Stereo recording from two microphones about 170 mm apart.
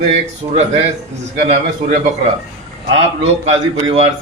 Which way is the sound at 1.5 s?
45° right (ahead or behind).